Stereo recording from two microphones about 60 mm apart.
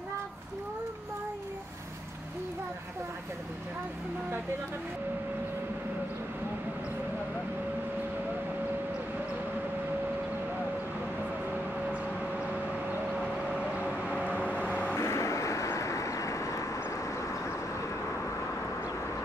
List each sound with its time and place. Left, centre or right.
11.5 s a sound: right
13.2 s vehicle: centre
14.2 s vehicle: left
15.0 s vehicle: left